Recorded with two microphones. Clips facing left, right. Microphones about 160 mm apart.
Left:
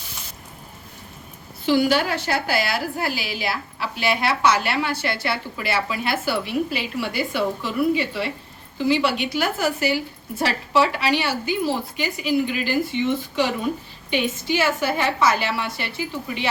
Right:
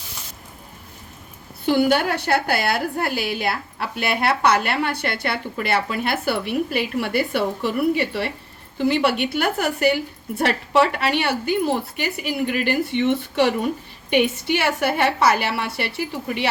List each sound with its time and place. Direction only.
1.6 s a woman's voice: 55° right (ahead or behind)
14.1 s a woman's voice: 65° right (ahead or behind)